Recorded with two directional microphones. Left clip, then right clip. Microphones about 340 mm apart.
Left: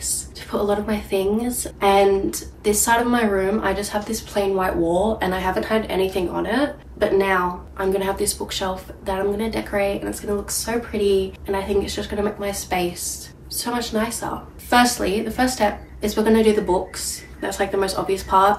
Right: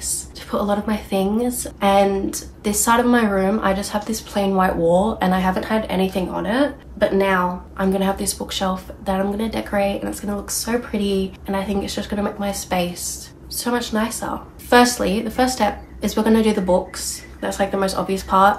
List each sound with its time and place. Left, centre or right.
0.0 s a woman's voice: centre
2.6 s speech: centre